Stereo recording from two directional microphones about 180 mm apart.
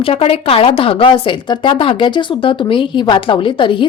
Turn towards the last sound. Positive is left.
turn(degrees=30)  # may be behind; listen again after turning